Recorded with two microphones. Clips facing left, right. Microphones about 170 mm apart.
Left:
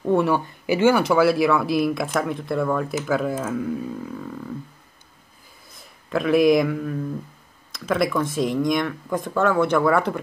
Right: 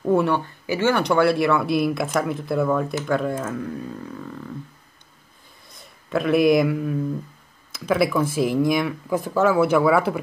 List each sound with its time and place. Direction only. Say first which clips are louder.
0.0 s speech: even; centre (ahead or behind)
0.7 s speech: left 3 dB; 10° left (ahead or behind)
5.7 s speech: right 1 dB; centre (ahead or behind)